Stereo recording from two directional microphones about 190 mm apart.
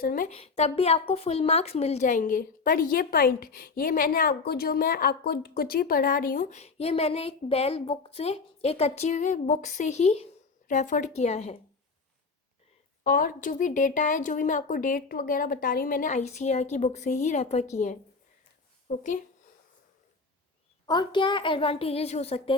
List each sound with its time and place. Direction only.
0.0 s speech: 50° left (ahead or behind)
0.3 s speech: 35° left (ahead or behind)
6.6 s a woman's voice: 35° left (ahead or behind)
13.1 s speech: 45° left (ahead or behind)
20.8 s a woman's voice: 25° left (ahead or behind)